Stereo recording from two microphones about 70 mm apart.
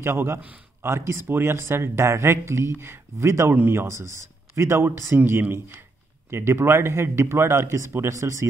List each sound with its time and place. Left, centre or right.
0.0 s speech: right